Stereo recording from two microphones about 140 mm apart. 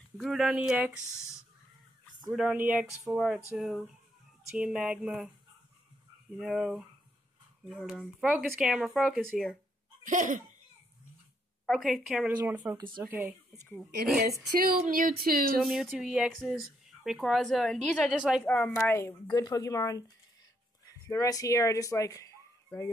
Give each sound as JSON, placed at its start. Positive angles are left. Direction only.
{"t": 0.2, "sound": "speech", "side_deg": 0}
{"t": 1.0, "sound": "speech", "side_deg": 20}
{"t": 2.5, "sound": "speech", "side_deg": -10}
{"t": 6.3, "sound": "speech", "side_deg": 0}
{"t": 10.0, "sound": "laughter", "side_deg": -65}
{"t": 11.6, "sound": "speech", "side_deg": 0}
{"t": 12.4, "sound": "speech", "side_deg": -15}
{"t": 12.7, "sound": "speech", "side_deg": -35}
{"t": 13.0, "sound": "speech", "side_deg": -10}
{"t": 14.6, "sound": "speech", "side_deg": -90}
{"t": 15.6, "sound": "speech", "side_deg": 0}
{"t": 18.4, "sound": "speech", "side_deg": 10}
{"t": 19.2, "sound": "speech", "side_deg": 30}